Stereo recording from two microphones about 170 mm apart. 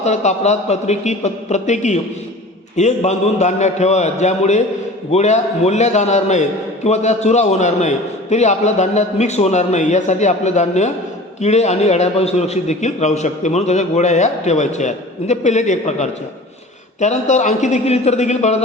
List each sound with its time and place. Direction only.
0.0 s a man's voice: 40° left (ahead or behind)